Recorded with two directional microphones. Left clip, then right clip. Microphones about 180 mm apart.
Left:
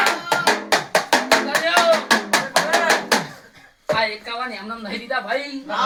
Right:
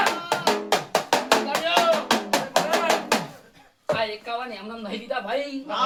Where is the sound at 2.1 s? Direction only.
5° left (ahead or behind).